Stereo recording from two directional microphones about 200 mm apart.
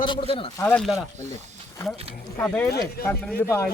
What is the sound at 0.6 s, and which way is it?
Speech, 10° left (ahead or behind).